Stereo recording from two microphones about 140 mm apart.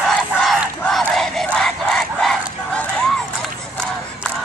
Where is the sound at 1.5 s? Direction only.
5° left (ahead or behind).